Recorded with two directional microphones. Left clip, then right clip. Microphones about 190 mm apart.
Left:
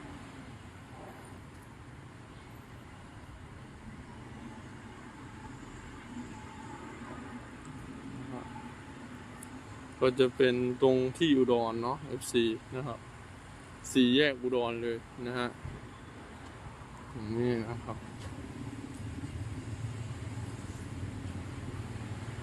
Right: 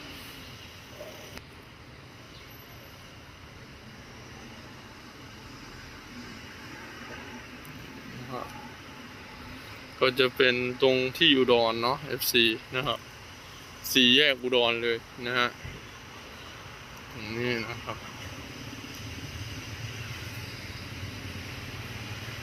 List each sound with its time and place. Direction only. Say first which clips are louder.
10.0 s speech: right 3 dB; 5° left (ahead or behind)
11.2 s speech: right 10 dB; 5° left (ahead or behind)
17.4 s a sound: right 3 dB; 25° left (ahead or behind)